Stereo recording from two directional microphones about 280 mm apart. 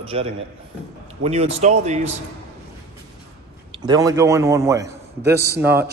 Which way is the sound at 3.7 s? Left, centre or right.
Centre.